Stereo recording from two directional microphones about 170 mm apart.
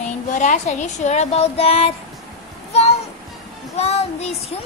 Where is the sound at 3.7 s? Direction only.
40° left (ahead or behind).